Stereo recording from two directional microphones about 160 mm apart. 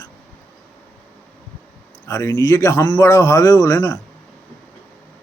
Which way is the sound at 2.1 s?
15° left (ahead or behind).